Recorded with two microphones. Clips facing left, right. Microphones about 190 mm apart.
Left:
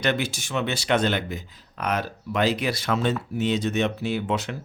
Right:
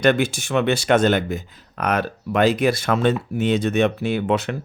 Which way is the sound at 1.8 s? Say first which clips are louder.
Right 5 dB; 60° right (ahead or behind).